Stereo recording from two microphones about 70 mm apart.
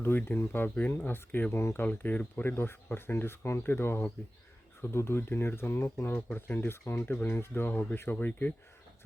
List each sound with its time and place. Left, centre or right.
0.0 s speech: left
7.1 s speech: left